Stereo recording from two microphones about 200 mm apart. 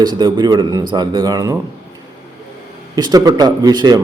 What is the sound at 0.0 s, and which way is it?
A man's voice, 20° right (ahead or behind).